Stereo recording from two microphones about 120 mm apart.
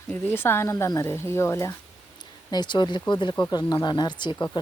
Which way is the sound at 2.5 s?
40° left (ahead or behind).